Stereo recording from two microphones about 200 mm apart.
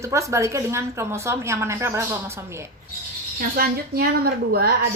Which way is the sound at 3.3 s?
50° right (ahead or behind).